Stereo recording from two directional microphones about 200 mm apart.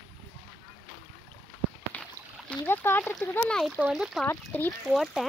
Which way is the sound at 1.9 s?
10° left (ahead or behind).